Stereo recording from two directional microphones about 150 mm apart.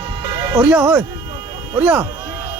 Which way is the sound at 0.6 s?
10° right (ahead or behind).